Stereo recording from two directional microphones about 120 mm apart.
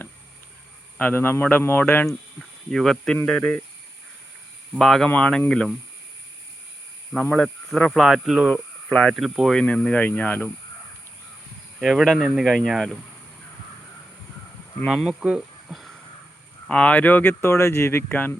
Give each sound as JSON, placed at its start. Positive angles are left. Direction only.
{"t": 0.9, "sound": "speech", "side_deg": 15}
{"t": 2.4, "sound": "speech", "side_deg": 5}
{"t": 4.8, "sound": "speech", "side_deg": 5}
{"t": 7.1, "sound": "speech", "side_deg": 5}
{"t": 8.9, "sound": "speech", "side_deg": 5}
{"t": 11.8, "sound": "speech", "side_deg": 0}
{"t": 14.8, "sound": "speech", "side_deg": 0}
{"t": 15.3, "sound": "a sound", "side_deg": -5}
{"t": 16.6, "sound": "speech", "side_deg": 10}